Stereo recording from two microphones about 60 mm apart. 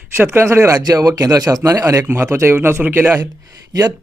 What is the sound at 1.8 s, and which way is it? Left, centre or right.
Speech, right.